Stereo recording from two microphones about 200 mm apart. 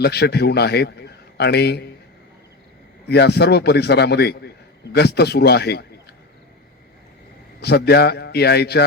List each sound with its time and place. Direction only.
0.0 s a man's voice: 55° left (ahead or behind)
3.1 s a man's voice: 55° left (ahead or behind)
7.6 s a man's voice: 55° left (ahead or behind)